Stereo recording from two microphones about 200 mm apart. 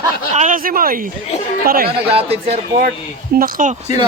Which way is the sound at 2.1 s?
30° right (ahead or behind).